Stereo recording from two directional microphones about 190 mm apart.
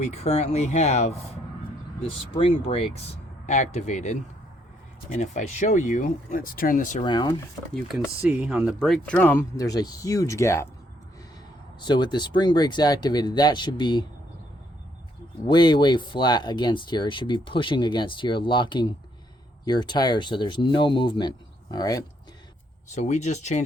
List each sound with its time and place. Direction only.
0.0 s speech: 35° left (ahead or behind)
7.0 s speech: 25° left (ahead or behind)
7.7 s speech: centre (ahead or behind); by 10.7 s 15° left (ahead or behind)
11.8 s speech: 25° left (ahead or behind)
15.4 s speech: 25° left (ahead or behind)
23.0 s speech: 35° left (ahead or behind)